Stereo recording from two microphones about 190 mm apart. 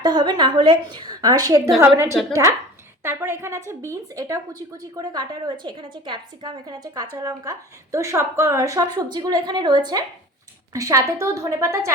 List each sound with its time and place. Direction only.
0.0 s a woman's voice: 20° right (ahead or behind)